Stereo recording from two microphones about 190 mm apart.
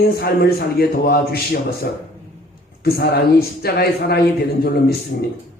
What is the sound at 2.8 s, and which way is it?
A man's voice, 55° left (ahead or behind).